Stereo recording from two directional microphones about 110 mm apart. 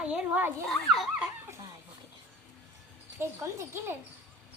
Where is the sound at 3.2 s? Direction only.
20° right (ahead or behind).